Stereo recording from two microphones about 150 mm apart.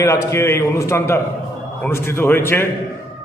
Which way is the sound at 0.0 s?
20° left (ahead or behind).